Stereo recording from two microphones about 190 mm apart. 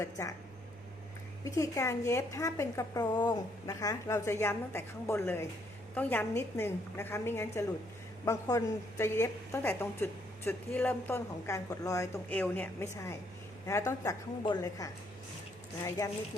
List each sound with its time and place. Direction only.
0.0 s a woman's voice: 15° left (ahead or behind)
1.5 s a woman's voice: 15° left (ahead or behind)